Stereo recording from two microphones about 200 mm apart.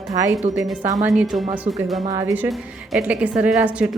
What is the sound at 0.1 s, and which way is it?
A woman's voice, 15° right (ahead or behind).